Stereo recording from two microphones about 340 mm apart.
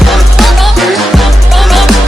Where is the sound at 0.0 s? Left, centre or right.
Centre.